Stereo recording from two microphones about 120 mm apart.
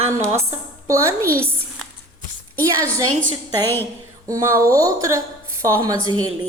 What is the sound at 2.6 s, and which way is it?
Speech, 30° right (ahead or behind).